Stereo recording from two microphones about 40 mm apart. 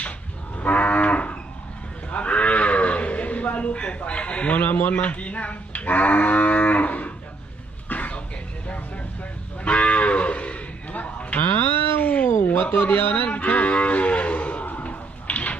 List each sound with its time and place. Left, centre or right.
0.5 s livestock: left
4.5 s speech: left
4.9 s livestock: left
7.9 s a sound: left
9.6 s cattle: left
11.5 s a sound: left
12.6 s speech: left
13.0 s speech: left
13.2 s cattle: left
14.7 s a sound: left